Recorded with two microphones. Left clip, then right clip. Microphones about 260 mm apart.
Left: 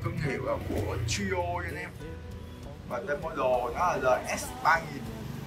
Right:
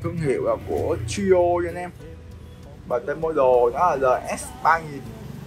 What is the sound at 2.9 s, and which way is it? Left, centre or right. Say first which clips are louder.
Speech: right 9 dB; centre.